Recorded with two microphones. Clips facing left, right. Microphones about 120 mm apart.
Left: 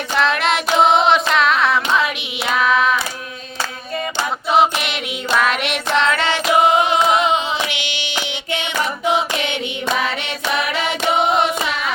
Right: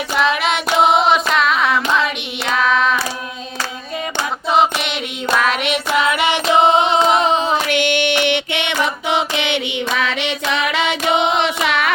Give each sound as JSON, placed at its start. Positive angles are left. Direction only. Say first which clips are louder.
{"t": 0.2, "sound": "hands", "louder": "even", "side_deg": 0}
{"t": 4.4, "sound": "music", "louder": "even", "side_deg": 0}
{"t": 5.4, "sound": "child singing", "louder": "even", "side_deg": 0}
{"t": 6.4, "sound": "singing", "louder": "right 1 dB", "side_deg": -30}
{"t": 10.0, "sound": "a sound", "louder": "right 2 dB", "side_deg": -90}